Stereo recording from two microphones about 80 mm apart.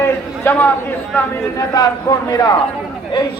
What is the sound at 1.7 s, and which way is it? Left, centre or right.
Speech, left.